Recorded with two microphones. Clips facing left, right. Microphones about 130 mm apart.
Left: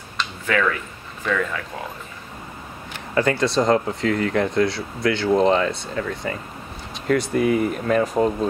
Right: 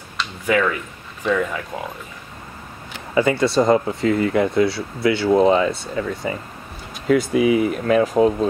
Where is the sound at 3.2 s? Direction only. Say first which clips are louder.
Right 3 dB; 5° right (ahead or behind).